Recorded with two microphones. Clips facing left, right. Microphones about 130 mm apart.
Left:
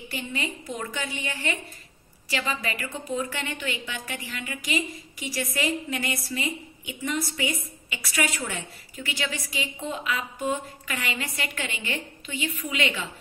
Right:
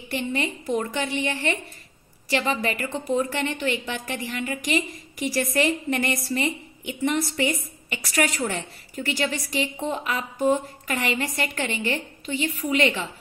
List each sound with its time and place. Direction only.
0.3 s a woman's voice: 40° right (ahead or behind)